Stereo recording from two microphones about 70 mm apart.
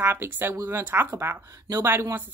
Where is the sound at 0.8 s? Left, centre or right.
Right.